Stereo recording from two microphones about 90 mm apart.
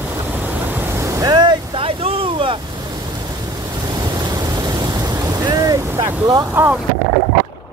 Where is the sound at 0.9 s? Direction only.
35° right (ahead or behind); by 1.8 s 55° right (ahead or behind).